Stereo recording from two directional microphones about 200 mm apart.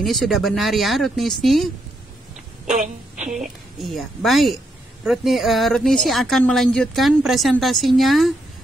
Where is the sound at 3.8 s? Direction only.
Centre (ahead or behind).